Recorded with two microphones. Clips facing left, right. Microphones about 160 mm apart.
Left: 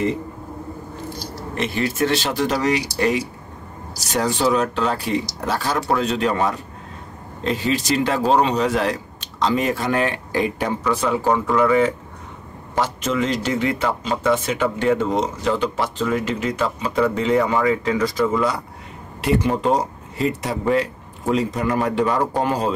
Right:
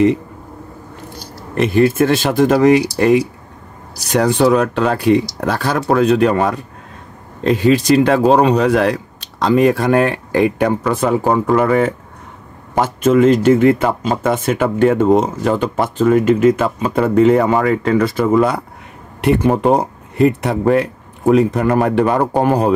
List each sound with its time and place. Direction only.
1.8 s speech: 50° right (ahead or behind)